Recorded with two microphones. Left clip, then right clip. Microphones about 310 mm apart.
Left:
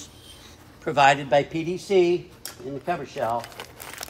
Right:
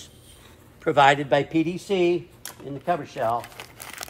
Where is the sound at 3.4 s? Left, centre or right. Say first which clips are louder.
Left 1 dB; centre.